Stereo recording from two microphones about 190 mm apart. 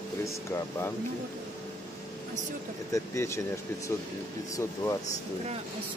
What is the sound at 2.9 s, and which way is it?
Speech, 15° left (ahead or behind).